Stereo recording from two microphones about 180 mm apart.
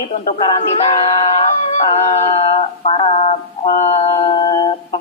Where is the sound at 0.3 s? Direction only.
30° left (ahead or behind).